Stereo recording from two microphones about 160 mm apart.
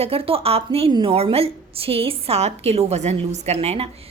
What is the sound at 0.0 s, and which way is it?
A woman's voice, 35° right (ahead or behind).